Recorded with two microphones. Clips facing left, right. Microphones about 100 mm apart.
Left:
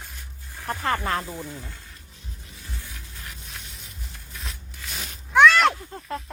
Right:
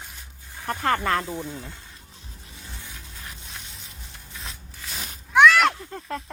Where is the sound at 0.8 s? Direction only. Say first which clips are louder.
Right 3 dB; 55° right (ahead or behind).